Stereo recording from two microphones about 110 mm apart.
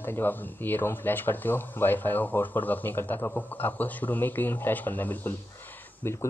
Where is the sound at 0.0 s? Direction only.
20° left (ahead or behind).